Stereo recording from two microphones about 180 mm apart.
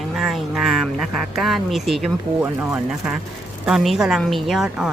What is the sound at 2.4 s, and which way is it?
A woman's voice, 5° right (ahead or behind).